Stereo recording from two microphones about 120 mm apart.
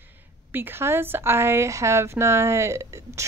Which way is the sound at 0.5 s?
15° right (ahead or behind).